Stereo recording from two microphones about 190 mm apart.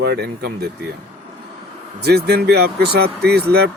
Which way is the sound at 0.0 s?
60° right (ahead or behind).